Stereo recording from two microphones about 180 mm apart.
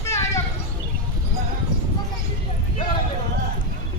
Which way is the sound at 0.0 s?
15° left (ahead or behind).